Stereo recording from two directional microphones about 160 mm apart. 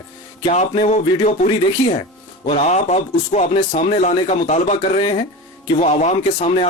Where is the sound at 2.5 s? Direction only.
45° left (ahead or behind).